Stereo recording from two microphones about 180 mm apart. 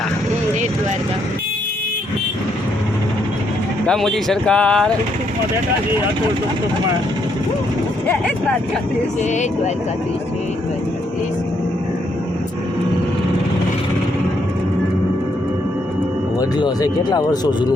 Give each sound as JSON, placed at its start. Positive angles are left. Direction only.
{"t": 3.8, "sound": "speech", "side_deg": 0}
{"t": 16.4, "sound": "speech", "side_deg": 20}